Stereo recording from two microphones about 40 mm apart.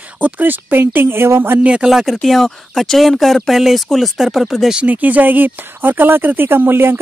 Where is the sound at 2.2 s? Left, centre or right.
Centre.